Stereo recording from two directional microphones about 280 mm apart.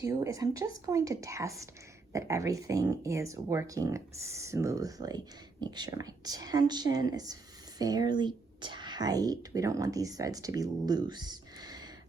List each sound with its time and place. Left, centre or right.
0.0 s speech: centre